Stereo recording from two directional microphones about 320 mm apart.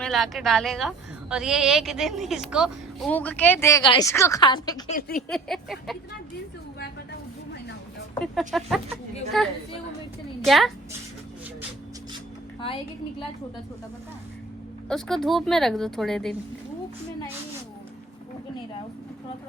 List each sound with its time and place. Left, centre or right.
0.0 s a woman's voice: centre
4.9 s a sound: left
5.3 s a woman's voice: centre
8.2 s a woman's voice: centre
12.5 s a woman's voice: centre
14.8 s a woman's voice: centre